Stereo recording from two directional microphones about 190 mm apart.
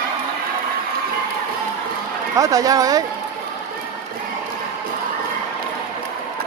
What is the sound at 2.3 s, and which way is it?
Speech, 20° right (ahead or behind).